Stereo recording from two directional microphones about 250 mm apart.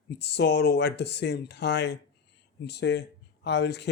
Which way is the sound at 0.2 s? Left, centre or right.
Left.